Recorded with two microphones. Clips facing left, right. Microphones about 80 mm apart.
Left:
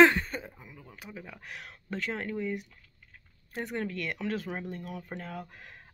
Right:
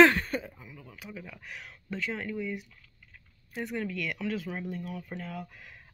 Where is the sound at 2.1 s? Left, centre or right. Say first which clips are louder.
Left 2 dB; left.